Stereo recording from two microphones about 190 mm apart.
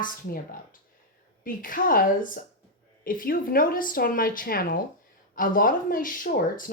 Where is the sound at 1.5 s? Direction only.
45° left (ahead or behind).